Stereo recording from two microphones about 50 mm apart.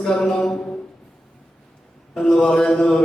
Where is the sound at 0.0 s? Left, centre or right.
Centre.